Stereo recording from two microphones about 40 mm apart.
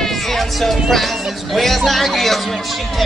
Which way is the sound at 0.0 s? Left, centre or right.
Centre.